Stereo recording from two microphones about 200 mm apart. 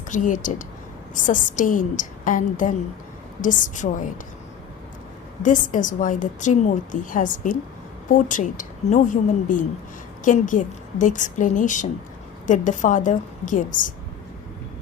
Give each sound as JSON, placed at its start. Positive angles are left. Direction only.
{"t": 0.1, "sound": "a woman's voice", "side_deg": 40}
{"t": 5.4, "sound": "a woman's voice", "side_deg": 40}